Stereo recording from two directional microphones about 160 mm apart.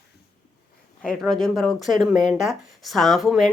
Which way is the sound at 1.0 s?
5° left (ahead or behind).